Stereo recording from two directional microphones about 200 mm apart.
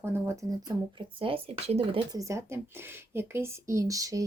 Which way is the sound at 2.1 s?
15° right (ahead or behind).